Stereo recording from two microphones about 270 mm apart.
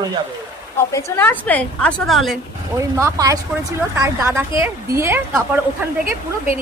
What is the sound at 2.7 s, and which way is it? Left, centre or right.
Speech, centre.